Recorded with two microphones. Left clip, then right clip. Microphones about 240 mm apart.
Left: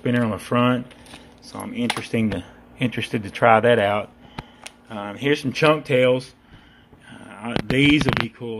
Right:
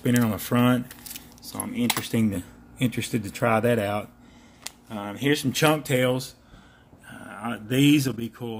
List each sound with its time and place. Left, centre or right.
0.0 s speech: centre